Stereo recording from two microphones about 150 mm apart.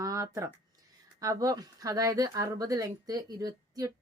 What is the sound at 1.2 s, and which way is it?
Speech, 25° right (ahead or behind).